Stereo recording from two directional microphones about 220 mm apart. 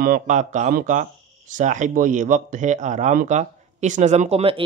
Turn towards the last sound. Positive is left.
turn(degrees=-25)  # may be behind; listen again after turning